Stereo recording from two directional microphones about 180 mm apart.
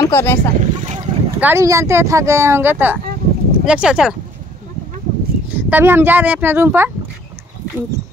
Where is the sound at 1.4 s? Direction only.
15° right (ahead or behind).